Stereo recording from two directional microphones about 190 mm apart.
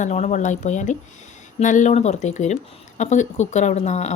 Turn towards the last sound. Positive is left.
turn(degrees=35)  # may be behind; listen again after turning